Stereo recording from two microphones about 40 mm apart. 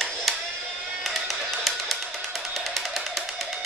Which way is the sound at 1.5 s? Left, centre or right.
Centre.